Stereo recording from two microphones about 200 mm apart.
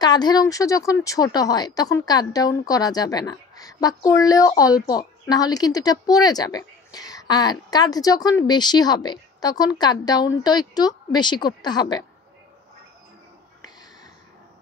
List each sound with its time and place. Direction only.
0.0 s speech: 20° left (ahead or behind)